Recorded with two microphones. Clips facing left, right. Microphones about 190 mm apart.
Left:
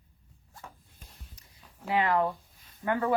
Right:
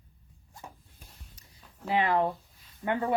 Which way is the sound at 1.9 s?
25° right (ahead or behind).